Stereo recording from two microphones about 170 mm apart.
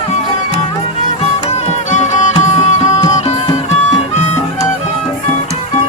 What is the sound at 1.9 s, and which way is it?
Music, 45° left (ahead or behind).